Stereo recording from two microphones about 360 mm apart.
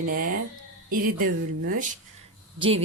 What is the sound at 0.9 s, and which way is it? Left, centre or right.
Speech, right.